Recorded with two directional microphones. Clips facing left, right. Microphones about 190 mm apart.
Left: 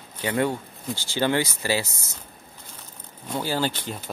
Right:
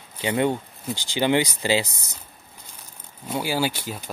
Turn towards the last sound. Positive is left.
turn(degrees=-10)  # may be behind; listen again after turning